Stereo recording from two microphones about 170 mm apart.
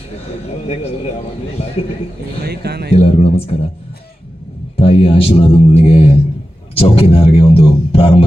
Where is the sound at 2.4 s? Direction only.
70° right (ahead or behind).